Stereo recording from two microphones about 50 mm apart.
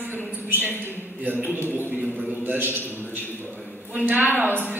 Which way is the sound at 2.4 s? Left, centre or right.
Right.